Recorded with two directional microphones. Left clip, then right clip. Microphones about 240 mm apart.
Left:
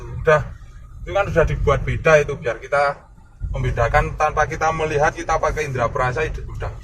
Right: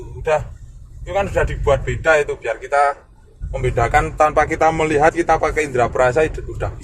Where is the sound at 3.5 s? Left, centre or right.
Right.